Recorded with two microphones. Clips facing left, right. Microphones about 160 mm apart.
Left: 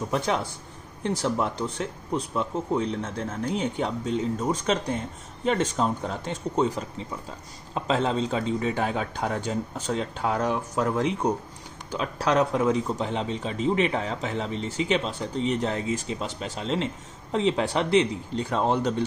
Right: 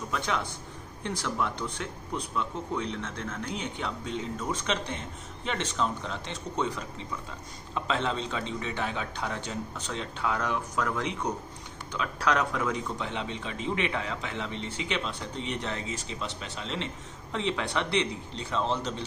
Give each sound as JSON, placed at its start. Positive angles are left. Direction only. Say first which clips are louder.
{"t": 0.1, "sound": "a man's voice", "louder": "left 4 dB", "side_deg": 40}